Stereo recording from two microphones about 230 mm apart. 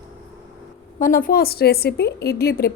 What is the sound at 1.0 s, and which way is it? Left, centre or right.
A woman's voice, left.